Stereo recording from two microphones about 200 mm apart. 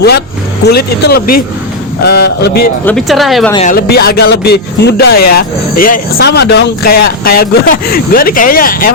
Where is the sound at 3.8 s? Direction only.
50° left (ahead or behind).